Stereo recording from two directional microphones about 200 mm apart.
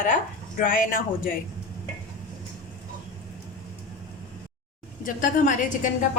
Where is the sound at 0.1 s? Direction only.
45° left (ahead or behind).